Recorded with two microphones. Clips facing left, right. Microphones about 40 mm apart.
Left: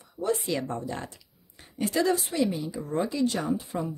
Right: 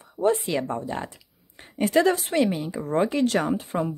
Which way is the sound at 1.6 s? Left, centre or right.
Right.